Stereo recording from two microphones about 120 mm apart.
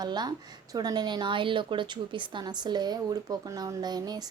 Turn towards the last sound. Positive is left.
turn(degrees=-35)  # may be behind; listen again after turning